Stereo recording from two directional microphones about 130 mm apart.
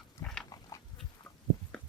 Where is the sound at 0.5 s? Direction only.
25° left (ahead or behind).